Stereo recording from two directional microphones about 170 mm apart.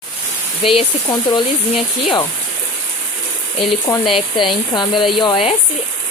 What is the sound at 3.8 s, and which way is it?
Speech, 25° left (ahead or behind).